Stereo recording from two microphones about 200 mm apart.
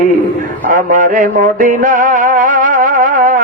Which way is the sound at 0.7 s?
40° right (ahead or behind).